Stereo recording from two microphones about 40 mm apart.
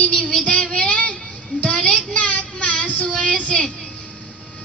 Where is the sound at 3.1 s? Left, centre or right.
Left.